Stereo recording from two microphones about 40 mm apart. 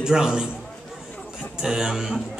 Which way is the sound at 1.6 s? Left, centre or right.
Centre.